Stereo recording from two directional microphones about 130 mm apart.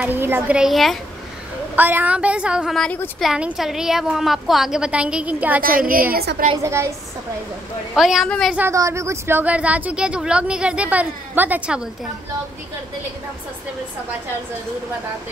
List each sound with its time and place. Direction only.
0.0 s speech: 15° right (ahead or behind)
0.6 s a woman's voice: centre (ahead or behind)
1.8 s a woman's voice: 15° right (ahead or behind)
5.6 s a woman's voice: 90° right
6.6 s a woman's voice: 20° right (ahead or behind)
7.9 s a woman's voice: centre (ahead or behind)
8.5 s speech: 20° right (ahead or behind)